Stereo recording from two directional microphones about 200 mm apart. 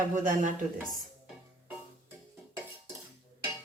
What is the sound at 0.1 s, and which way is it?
Speech, 40° right (ahead or behind).